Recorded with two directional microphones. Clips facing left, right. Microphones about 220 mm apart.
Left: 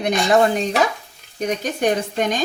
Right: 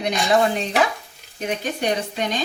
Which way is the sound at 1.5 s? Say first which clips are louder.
Left 3 dB; 45° left (ahead or behind).